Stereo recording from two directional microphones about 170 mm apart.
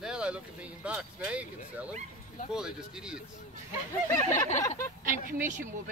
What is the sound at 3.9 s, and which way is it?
Speech, 15° left (ahead or behind).